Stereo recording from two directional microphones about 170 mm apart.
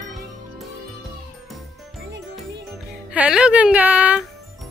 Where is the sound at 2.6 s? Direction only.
5° right (ahead or behind).